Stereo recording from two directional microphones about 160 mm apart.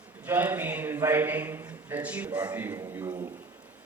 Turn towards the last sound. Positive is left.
turn(degrees=-15)  # may be behind; listen again after turning